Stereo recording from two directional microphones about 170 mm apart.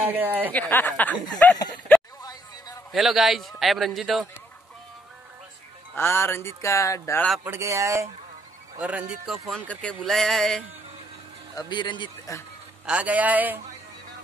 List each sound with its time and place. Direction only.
0.0 s a man's voice: 10° right (ahead or behind)
0.5 s speech: 10° left (ahead or behind)
1.9 s a sound: 10° left (ahead or behind)
2.9 s a man's voice: centre (ahead or behind)
5.9 s speech: 15° left (ahead or behind)
7.4 s a man's voice: 15° right (ahead or behind); by 10.6 s centre (ahead or behind)
11.5 s a man's voice: 30° left (ahead or behind)
12.8 s a man's voice: 10° right (ahead or behind)